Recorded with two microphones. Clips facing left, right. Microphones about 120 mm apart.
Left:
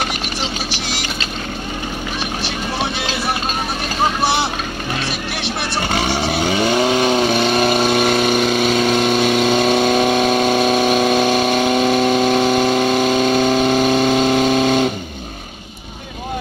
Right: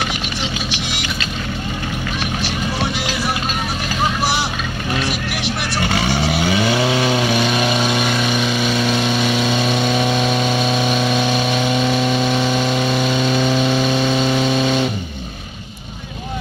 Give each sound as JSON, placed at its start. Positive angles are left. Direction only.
{"t": 4.2, "sound": "vehicle", "side_deg": 25}
{"t": 5.4, "sound": "vehicle", "side_deg": 35}